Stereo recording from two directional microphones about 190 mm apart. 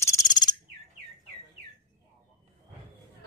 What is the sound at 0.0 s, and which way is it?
Bird, 20° left (ahead or behind).